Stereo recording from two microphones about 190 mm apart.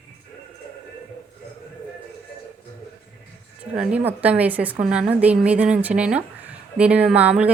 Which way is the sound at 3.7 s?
5° right (ahead or behind).